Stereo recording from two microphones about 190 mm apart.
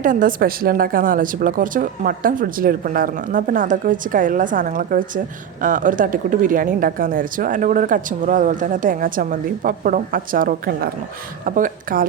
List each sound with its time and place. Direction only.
0.0 s a woman's voice: 45° right (ahead or behind)